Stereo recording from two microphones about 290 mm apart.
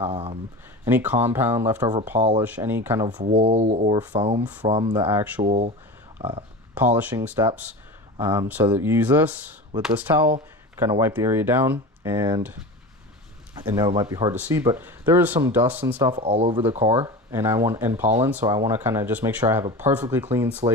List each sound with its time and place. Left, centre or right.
0.0 s speech: centre
0.9 s speech: centre
3.2 s speech: right
4.4 s speech: centre
4.7 s speech: centre
5.4 s speech: right
6.1 s speech: centre
13.7 s speech: centre
16.2 s speech: right
17.0 s speech: centre